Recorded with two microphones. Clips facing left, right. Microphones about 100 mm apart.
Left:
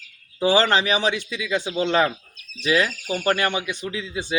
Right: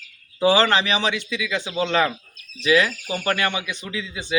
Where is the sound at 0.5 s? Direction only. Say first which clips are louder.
Even; 35° left (ahead or behind).